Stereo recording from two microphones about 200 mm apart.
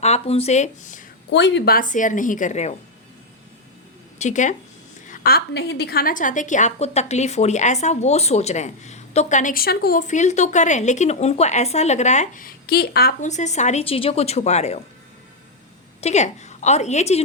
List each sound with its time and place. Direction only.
0.0 s a woman's voice: 30° left (ahead or behind)
1.3 s a woman's voice: 60° left (ahead or behind); by 2.7 s 35° left (ahead or behind)
4.2 s a woman's voice: 35° left (ahead or behind)
16.0 s a woman's voice: 35° left (ahead or behind)